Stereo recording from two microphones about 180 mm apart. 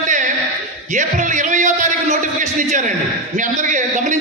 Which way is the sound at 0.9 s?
45° right (ahead or behind).